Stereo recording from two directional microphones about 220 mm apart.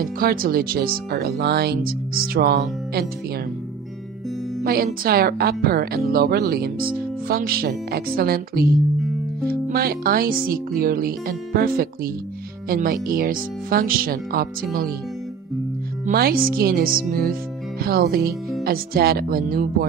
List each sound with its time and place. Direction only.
0.0 s speech: 40° right (ahead or behind)
4.6 s speech: 45° right (ahead or behind)
16.1 s speech: 45° right (ahead or behind)